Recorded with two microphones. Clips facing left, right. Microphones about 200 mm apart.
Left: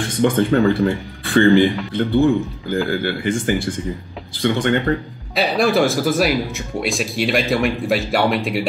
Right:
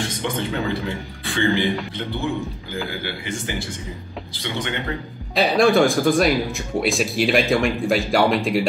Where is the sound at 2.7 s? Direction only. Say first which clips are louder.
Left 10 dB; 50° left (ahead or behind).